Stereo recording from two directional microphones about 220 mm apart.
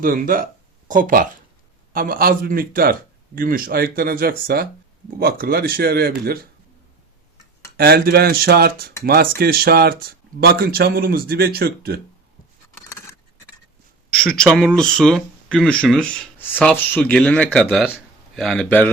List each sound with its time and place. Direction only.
0.0 s a man's voice: 40° right (ahead or behind)
7.8 s speech: 45° right (ahead or behind)
14.1 s a man's voice: 5° left (ahead or behind)